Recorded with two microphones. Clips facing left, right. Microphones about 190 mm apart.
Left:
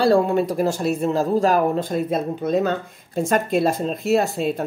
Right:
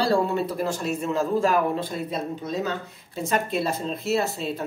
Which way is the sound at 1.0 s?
40° left (ahead or behind).